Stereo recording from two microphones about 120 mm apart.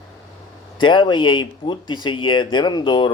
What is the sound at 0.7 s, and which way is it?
Speech, 40° left (ahead or behind).